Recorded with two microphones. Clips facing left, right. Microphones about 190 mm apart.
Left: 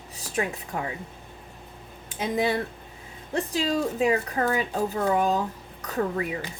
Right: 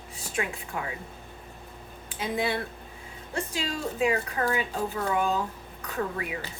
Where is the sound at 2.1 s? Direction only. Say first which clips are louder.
Left 4 dB; 40° left (ahead or behind).